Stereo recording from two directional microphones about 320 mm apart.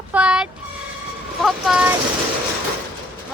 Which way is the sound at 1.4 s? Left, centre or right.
Centre.